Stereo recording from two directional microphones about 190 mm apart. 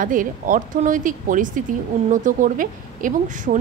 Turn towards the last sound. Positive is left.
turn(degrees=-40)  # may be behind; listen again after turning